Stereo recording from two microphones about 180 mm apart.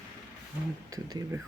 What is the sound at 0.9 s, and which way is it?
Speech, 20° right (ahead or behind).